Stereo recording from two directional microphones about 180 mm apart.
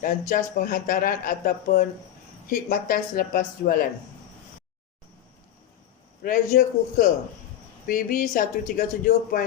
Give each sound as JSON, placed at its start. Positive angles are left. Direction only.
{"t": 0.0, "sound": "speech", "side_deg": 50}
{"t": 6.2, "sound": "speech", "side_deg": 50}